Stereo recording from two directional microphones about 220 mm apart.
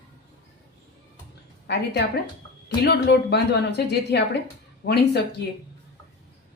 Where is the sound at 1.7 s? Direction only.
50° left (ahead or behind).